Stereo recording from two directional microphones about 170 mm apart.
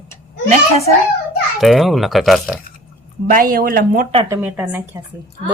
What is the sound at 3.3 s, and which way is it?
Speech, 55° right (ahead or behind).